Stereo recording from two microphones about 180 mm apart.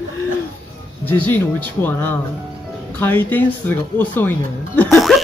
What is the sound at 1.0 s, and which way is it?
Speech, 10° left (ahead or behind).